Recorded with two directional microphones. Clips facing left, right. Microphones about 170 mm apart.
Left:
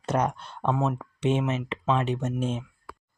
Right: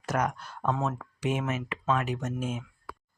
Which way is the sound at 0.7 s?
15° left (ahead or behind).